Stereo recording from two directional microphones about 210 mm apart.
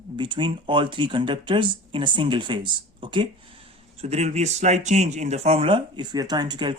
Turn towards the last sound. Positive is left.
turn(degrees=-20)  # may be behind; listen again after turning